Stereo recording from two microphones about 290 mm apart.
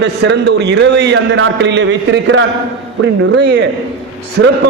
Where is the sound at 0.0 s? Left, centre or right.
Right.